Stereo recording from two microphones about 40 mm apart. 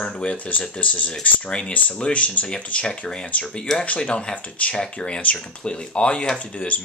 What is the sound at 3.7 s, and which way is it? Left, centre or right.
Speech, centre.